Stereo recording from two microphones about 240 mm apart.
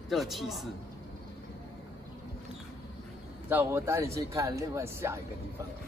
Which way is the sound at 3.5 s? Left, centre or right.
Centre.